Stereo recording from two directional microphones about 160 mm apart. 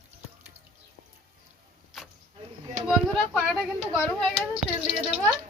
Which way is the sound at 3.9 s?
15° left (ahead or behind).